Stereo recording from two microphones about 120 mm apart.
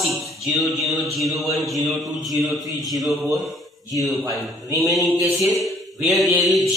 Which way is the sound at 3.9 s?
30° right (ahead or behind).